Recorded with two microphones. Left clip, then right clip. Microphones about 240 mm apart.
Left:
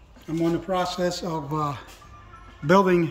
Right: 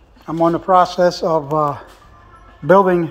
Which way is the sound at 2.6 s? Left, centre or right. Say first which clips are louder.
Right 7 dB; centre.